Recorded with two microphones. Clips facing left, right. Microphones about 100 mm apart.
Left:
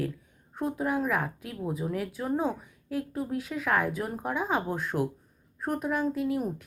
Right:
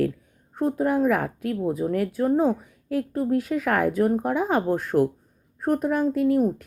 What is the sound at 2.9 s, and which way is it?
A woman's voice, 55° right (ahead or behind).